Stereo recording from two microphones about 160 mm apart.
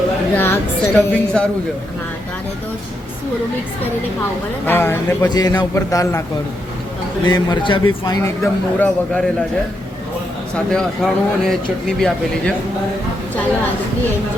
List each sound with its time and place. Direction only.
0.3 s a woman's voice: 15° left (ahead or behind)
4.6 s speech: 15° left (ahead or behind)
5.3 s a man's voice: 25° left (ahead or behind)
7.3 s a man's voice: 25° left (ahead or behind)
8.4 s a man's voice: 5° left (ahead or behind)
10.7 s a man's voice: 5° left (ahead or behind)